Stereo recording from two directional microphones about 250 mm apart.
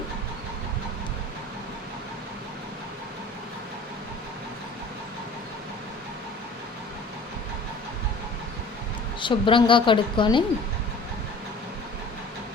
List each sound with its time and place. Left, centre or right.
9.2 s a woman's voice: centre